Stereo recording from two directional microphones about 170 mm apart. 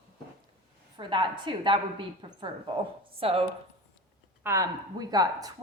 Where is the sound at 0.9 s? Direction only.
30° right (ahead or behind).